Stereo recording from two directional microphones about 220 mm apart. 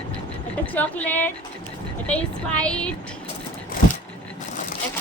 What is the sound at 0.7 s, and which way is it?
Speech, 5° left (ahead or behind).